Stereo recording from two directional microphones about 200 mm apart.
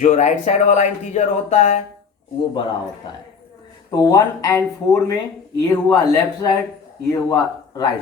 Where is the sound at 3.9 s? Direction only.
15° left (ahead or behind).